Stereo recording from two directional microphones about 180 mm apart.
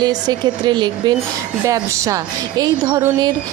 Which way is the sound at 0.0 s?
20° right (ahead or behind).